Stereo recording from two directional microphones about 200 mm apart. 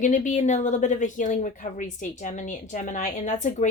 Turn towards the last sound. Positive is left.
turn(degrees=35)  # may be behind; listen again after turning